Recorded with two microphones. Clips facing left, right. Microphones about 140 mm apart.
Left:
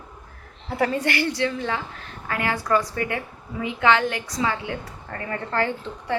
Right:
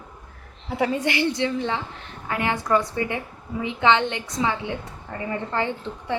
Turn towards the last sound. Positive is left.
turn(degrees=-15)  # may be behind; listen again after turning